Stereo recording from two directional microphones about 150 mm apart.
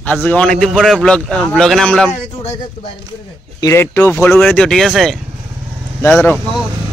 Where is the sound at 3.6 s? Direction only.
15° left (ahead or behind).